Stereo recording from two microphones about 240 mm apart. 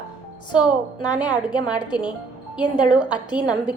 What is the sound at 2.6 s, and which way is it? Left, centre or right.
Speech, centre.